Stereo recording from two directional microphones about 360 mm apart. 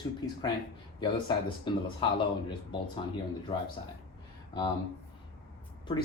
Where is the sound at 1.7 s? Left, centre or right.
Centre.